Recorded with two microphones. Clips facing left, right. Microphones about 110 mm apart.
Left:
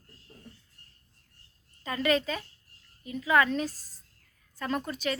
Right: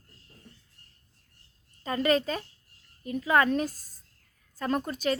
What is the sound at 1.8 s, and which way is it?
A child's voice, 35° right (ahead or behind).